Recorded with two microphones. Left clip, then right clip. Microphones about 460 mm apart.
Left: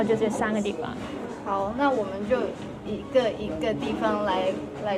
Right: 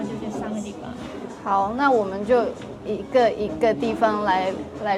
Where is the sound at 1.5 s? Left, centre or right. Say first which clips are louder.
Right 6 dB; right.